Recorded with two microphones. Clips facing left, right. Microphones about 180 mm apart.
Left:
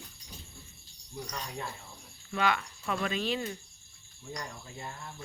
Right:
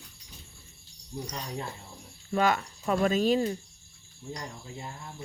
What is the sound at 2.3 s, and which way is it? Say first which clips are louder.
Speech: right 4 dB; 40° right (ahead or behind).